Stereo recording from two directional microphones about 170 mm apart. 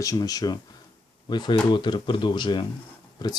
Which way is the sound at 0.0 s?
20° left (ahead or behind).